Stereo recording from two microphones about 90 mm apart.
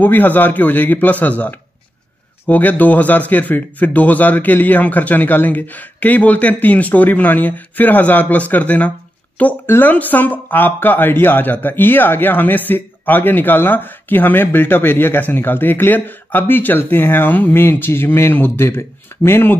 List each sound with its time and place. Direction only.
0.0 s speech: 20° left (ahead or behind)